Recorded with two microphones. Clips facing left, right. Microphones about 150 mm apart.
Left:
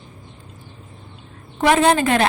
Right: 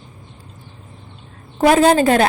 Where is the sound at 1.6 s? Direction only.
35° right (ahead or behind).